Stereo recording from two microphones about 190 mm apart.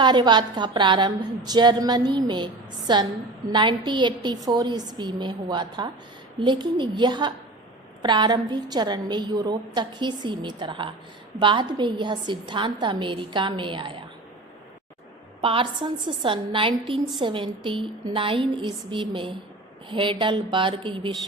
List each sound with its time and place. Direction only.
0.0 s a woman's voice: 25° right (ahead or behind)
15.4 s a woman's voice: 30° right (ahead or behind)